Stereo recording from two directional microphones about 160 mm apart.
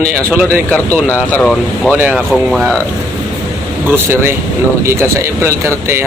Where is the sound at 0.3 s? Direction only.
15° right (ahead or behind).